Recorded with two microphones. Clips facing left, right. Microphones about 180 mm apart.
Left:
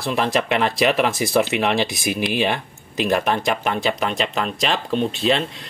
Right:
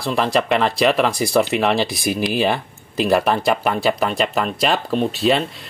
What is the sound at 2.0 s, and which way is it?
Speech, 40° right (ahead or behind).